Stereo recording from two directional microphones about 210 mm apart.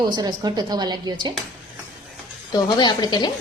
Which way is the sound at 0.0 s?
20° right (ahead or behind).